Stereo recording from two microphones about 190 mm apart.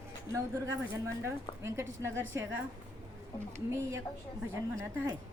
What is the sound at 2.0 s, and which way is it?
Speech, 85° right.